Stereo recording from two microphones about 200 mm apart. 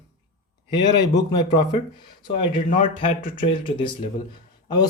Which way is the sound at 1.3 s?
20° left (ahead or behind).